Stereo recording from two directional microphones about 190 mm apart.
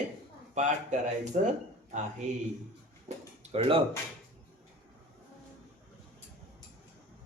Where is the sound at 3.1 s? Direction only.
35° right (ahead or behind).